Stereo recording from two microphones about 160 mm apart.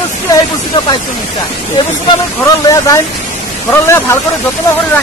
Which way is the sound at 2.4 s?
20° left (ahead or behind).